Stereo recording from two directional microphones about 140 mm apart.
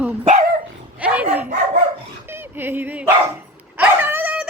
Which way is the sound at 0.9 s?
10° right (ahead or behind).